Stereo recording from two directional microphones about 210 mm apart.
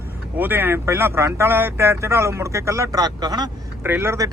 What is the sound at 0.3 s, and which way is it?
Speech, 10° right (ahead or behind).